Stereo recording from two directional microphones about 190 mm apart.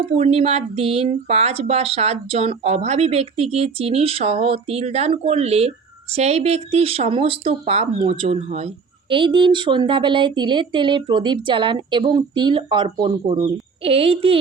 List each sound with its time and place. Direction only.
0.0 s speech: 30° right (ahead or behind)